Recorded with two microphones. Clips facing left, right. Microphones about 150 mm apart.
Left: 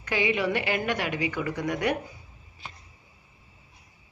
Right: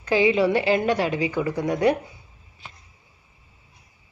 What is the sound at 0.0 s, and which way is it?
A woman's voice, 30° right (ahead or behind).